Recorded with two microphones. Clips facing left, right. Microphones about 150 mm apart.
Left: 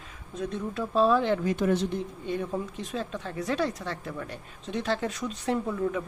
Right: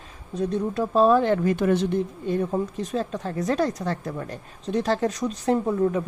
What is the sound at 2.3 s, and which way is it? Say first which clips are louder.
Speech: right 5 dB; 45° right (ahead or behind).